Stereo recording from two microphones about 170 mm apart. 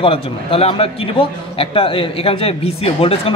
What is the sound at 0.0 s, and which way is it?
A man's voice, 35° left (ahead or behind).